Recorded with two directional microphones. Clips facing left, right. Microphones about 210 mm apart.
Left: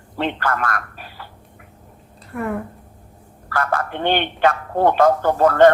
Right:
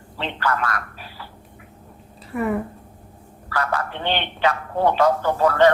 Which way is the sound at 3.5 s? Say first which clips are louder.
Left 2 dB; 50° left (ahead or behind).